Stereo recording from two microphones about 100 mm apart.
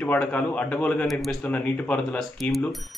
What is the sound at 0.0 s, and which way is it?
Speech, 15° left (ahead or behind).